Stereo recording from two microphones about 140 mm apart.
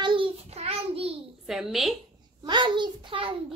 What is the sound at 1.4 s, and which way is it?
Speech, centre (ahead or behind).